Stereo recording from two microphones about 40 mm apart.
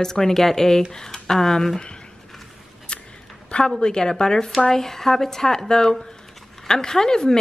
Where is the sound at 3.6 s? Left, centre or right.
Centre.